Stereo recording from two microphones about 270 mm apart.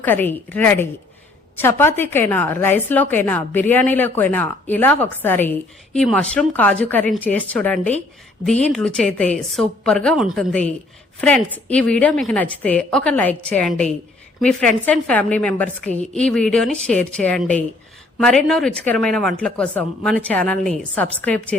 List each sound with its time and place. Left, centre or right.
0.0 s a woman's voice: centre
11.5 s a woman's voice: centre